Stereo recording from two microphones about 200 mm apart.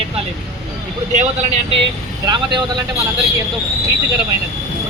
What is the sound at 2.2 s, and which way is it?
Speech, 20° right (ahead or behind).